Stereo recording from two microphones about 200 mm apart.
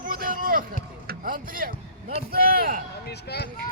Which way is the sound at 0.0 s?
45° right (ahead or behind).